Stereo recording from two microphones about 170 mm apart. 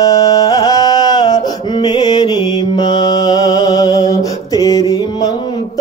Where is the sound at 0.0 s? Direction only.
20° left (ahead or behind).